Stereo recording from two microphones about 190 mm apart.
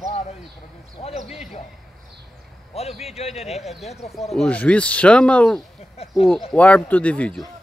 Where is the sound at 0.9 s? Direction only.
35° left (ahead or behind).